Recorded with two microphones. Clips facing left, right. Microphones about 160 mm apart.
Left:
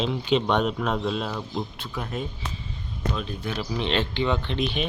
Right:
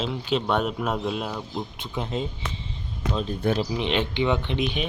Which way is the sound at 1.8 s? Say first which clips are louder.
Right 2 dB; 20° right (ahead or behind).